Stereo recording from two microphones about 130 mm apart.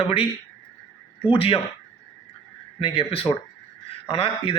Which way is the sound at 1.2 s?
45° left (ahead or behind).